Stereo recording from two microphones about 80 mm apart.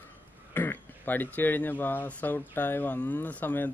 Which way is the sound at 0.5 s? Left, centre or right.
Left.